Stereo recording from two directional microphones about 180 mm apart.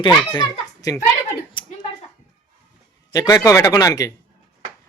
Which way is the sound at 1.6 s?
25° left (ahead or behind).